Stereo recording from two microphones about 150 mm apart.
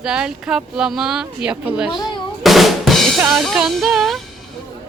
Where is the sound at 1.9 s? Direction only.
30° left (ahead or behind).